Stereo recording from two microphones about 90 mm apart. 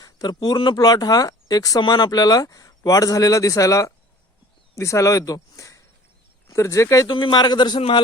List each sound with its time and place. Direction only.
0.0 s a sound: 50° left (ahead or behind)
0.3 s speech: 60° left (ahead or behind); by 7.1 s 35° left (ahead or behind)
7.1 s speech: 60° left (ahead or behind)
7.8 s a man's voice: 90° left